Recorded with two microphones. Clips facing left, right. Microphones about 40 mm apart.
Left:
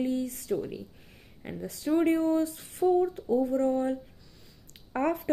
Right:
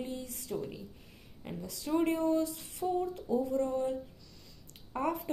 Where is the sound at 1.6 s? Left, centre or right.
Left.